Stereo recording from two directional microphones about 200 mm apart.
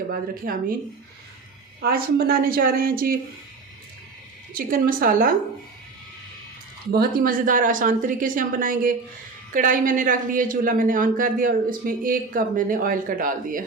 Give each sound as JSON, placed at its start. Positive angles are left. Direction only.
{"t": 0.1, "sound": "speech", "side_deg": -45}
{"t": 1.8, "sound": "speech", "side_deg": -50}
{"t": 4.5, "sound": "speech", "side_deg": -45}
{"t": 6.9, "sound": "speech", "side_deg": -45}